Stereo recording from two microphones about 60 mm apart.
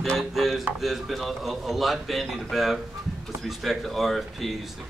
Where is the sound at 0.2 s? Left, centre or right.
Centre.